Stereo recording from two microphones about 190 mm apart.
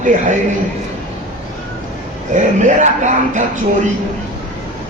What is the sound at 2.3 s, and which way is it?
A man's voice, 40° right (ahead or behind).